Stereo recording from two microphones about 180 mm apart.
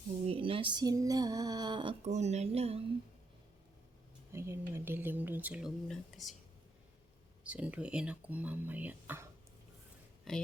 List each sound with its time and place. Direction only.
0.3 s a sound: 30° right (ahead or behind)
4.3 s speech: 15° right (ahead or behind)
7.4 s speech: 5° right (ahead or behind)
10.3 s speech: centre (ahead or behind)